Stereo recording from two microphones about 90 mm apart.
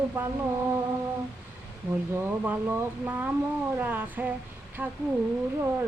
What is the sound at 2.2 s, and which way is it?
Female singing, 20° right (ahead or behind).